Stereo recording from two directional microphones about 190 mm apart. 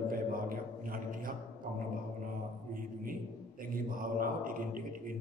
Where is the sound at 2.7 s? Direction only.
45° right (ahead or behind).